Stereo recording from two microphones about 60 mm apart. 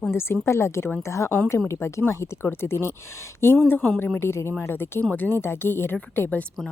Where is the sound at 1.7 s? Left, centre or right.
Left.